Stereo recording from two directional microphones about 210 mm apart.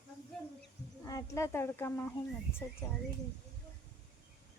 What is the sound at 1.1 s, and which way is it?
Speech, 15° left (ahead or behind).